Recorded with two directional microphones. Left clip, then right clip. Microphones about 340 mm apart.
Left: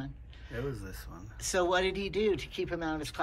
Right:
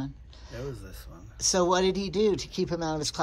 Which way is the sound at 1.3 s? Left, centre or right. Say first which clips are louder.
Right 4 dB; centre.